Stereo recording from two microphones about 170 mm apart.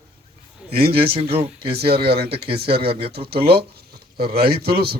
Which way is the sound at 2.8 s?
30° right (ahead or behind).